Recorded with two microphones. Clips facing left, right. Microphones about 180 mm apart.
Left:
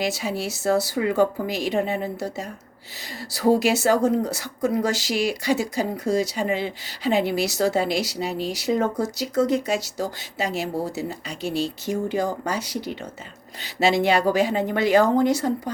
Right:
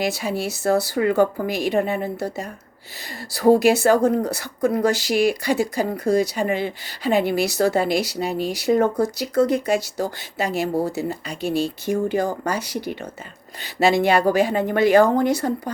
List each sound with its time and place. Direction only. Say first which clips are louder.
0.0 s speech: right 2 dB; 55° right (ahead or behind)